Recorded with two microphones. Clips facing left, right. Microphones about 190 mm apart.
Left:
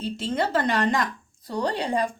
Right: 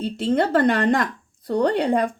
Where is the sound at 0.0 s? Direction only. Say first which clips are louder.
Right 6 dB; 60° right (ahead or behind).